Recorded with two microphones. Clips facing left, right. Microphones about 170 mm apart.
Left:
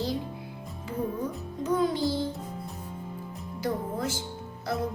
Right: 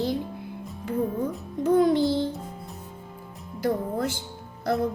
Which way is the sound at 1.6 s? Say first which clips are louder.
Right 6 dB; 60° right (ahead or behind).